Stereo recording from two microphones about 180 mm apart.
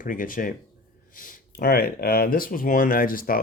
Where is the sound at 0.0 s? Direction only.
50° left (ahead or behind).